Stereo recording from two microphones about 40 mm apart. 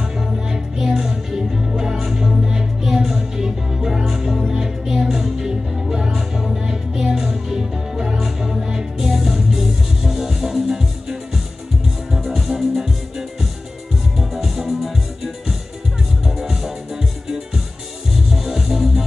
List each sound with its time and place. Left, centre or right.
0.0 s music: centre
14.1 s music: centre